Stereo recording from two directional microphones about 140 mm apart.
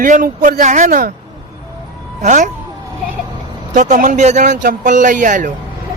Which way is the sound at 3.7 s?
65° right (ahead or behind).